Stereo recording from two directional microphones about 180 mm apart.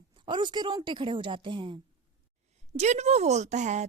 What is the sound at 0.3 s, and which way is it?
A woman's voice, 25° right (ahead or behind).